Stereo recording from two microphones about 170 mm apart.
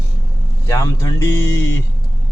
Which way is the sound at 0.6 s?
20° left (ahead or behind).